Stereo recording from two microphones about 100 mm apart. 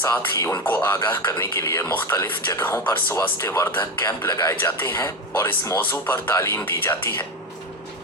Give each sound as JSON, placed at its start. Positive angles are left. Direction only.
{"t": 0.0, "sound": "speech", "side_deg": 25}